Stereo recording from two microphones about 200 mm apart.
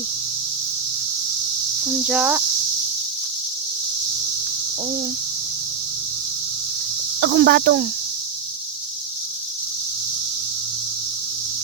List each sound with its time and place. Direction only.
1.8 s speech: 5° right (ahead or behind)
7.2 s speech: 60° right (ahead or behind)